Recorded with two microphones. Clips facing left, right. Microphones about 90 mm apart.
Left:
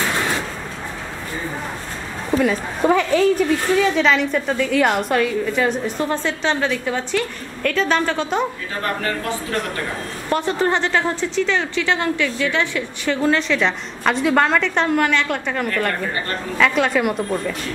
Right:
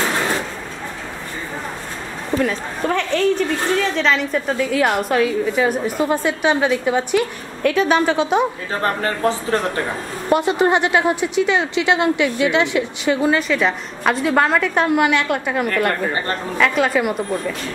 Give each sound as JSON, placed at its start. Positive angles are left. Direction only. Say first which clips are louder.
{"t": 2.3, "sound": "a woman's voice", "louder": "left 2 dB", "side_deg": 5}
{"t": 8.8, "sound": "speech", "louder": "right 4 dB", "side_deg": -30}
{"t": 10.3, "sound": "a woman's voice", "louder": "right 3 dB", "side_deg": -15}